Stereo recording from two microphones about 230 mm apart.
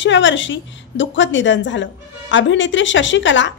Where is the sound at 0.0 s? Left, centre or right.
Left.